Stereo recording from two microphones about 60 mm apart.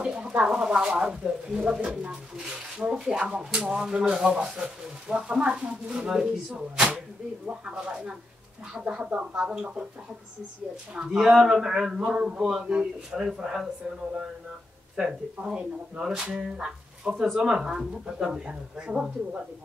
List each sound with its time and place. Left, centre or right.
0.0 s a sound: centre
0.4 s speech: centre
9.1 s speech: right
9.5 s speech: centre
11.1 s speech: centre
15.0 s speech: centre